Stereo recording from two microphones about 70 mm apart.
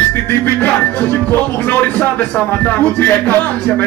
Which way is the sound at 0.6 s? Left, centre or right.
Left.